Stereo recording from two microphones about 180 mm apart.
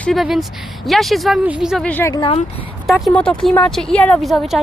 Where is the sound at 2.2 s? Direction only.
30° left (ahead or behind).